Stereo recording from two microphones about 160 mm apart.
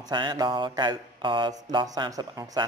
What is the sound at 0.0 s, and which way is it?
A man's voice, 30° right (ahead or behind).